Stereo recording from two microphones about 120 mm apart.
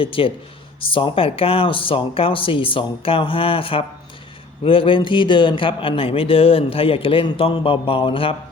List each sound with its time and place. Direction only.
0.0 s speech: 50° left (ahead or behind)